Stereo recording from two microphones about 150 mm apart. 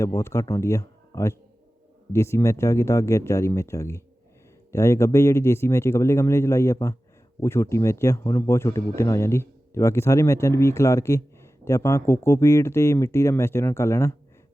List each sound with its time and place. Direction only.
0.0 s speech: 20° left (ahead or behind)